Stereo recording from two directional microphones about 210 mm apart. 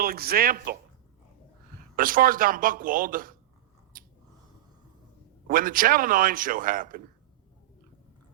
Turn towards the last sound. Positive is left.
turn(degrees=-40)  # may be behind; listen again after turning